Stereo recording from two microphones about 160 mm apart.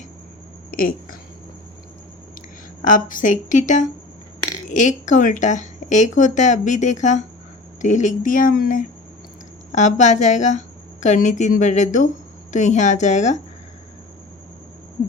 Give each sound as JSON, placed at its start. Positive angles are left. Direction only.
{"t": 0.7, "sound": "a sound", "side_deg": 60}
{"t": 2.8, "sound": "speech", "side_deg": 55}
{"t": 9.7, "sound": "speech", "side_deg": 50}